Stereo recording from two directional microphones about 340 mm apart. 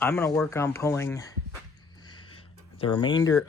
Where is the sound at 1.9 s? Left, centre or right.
Centre.